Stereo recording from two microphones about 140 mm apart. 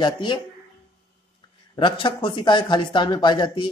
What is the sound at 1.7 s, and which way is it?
Speech, 35° left (ahead or behind).